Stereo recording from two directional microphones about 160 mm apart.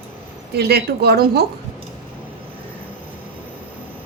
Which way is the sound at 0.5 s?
90° right.